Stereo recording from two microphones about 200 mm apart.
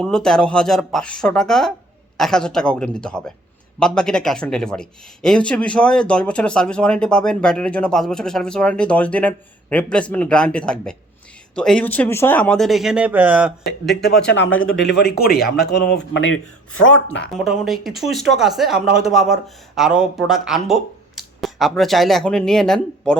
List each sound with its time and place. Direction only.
0.0 s a man's voice: 5° left (ahead or behind)
13.8 s speech: 55° left (ahead or behind)
14.3 s speech: 70° left (ahead or behind)
17.3 s a man's voice: centre (ahead or behind)